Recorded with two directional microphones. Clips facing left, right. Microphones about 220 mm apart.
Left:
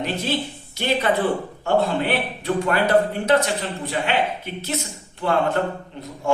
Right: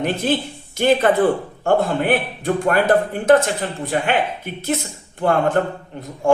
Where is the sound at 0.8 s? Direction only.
50° right (ahead or behind).